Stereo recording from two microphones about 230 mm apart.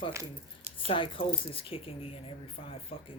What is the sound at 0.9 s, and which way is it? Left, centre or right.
Speech, left.